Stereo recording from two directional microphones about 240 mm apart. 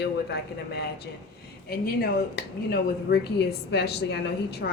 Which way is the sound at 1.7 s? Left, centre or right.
Left.